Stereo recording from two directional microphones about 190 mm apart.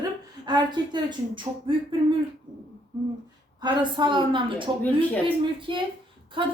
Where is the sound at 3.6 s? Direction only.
25° right (ahead or behind).